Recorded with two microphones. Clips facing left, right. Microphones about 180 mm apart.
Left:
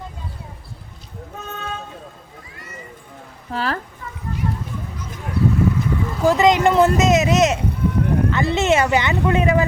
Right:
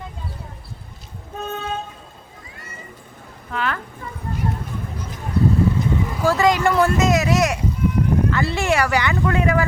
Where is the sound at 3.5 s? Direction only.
35° left (ahead or behind).